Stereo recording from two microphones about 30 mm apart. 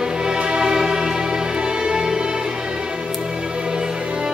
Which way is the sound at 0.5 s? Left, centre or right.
Right.